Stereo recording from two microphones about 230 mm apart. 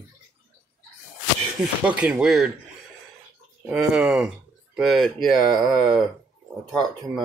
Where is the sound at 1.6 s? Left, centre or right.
Centre.